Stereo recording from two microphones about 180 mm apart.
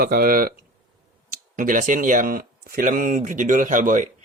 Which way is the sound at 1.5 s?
45° right (ahead or behind).